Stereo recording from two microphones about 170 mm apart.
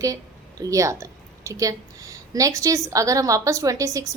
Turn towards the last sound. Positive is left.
turn(degrees=-20)  # may be behind; listen again after turning